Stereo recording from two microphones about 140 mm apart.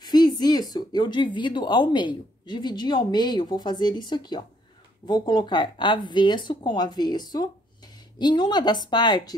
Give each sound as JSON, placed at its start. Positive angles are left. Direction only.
{"t": 0.0, "sound": "speech", "side_deg": 30}